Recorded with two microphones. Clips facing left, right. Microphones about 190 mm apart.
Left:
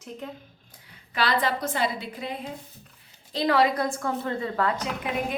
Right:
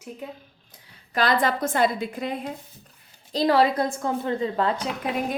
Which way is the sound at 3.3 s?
35° right (ahead or behind).